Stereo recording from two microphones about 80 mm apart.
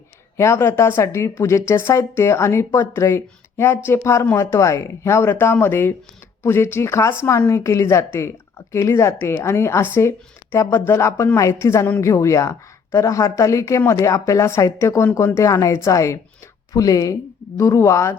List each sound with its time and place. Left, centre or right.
0.3 s speech: left